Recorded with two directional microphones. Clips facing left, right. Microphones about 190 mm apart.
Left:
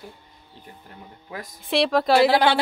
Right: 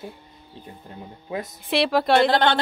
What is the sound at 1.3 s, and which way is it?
Speech, 25° right (ahead or behind).